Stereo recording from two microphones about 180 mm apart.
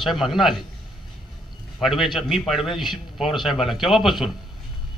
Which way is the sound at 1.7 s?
Centre (ahead or behind).